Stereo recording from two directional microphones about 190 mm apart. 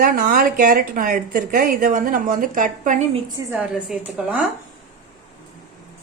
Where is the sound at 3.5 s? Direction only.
5° right (ahead or behind).